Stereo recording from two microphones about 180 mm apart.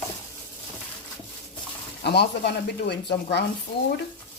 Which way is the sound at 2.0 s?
70° left (ahead or behind).